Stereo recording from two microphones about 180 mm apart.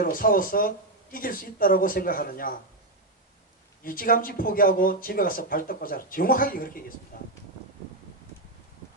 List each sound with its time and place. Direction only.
0.0 s speech: 50° left (ahead or behind)
3.8 s speech: 50° left (ahead or behind)